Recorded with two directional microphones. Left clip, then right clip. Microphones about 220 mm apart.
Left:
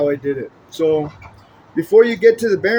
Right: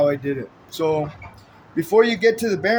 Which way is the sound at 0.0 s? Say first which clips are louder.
Left 1 dB; 55° right (ahead or behind).